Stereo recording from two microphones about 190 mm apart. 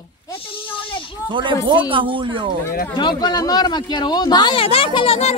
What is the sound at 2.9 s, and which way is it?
Speech, 20° left (ahead or behind).